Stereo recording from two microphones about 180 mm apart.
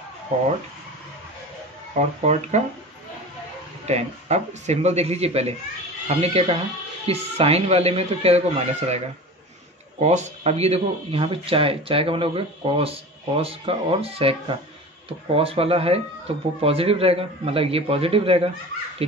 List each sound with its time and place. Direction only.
2.0 s speech: 40° right (ahead or behind)
3.8 s speech: 40° right (ahead or behind)